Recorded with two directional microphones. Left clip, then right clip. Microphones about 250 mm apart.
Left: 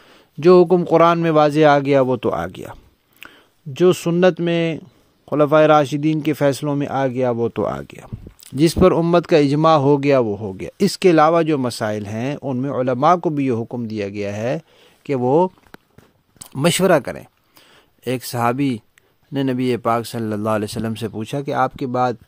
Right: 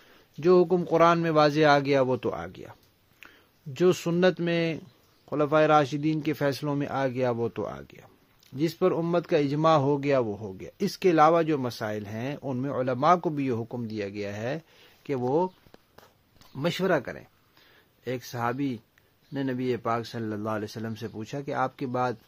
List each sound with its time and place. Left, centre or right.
0.4 s speech: left